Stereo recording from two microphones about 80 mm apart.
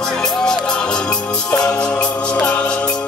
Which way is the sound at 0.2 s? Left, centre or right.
Centre.